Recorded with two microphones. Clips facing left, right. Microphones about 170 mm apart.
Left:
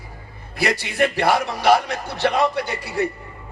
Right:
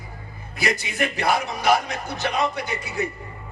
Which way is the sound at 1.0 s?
65° left (ahead or behind).